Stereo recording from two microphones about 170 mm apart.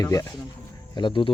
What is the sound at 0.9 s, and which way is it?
Speech, 30° left (ahead or behind).